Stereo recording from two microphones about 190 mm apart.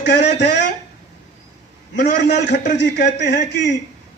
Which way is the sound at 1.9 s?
65° left (ahead or behind).